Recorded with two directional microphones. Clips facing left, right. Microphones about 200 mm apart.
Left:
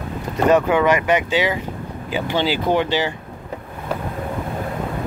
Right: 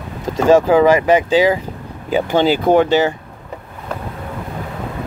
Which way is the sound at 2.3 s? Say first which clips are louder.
Right 6 dB; 45° right (ahead or behind).